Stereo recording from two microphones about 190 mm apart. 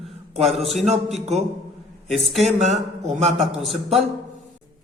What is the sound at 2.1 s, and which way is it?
Speech, centre (ahead or behind).